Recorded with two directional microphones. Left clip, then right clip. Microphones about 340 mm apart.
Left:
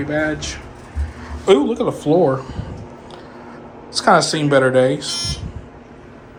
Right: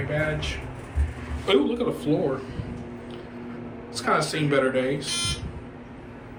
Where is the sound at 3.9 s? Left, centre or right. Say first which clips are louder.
Left 10 dB; centre.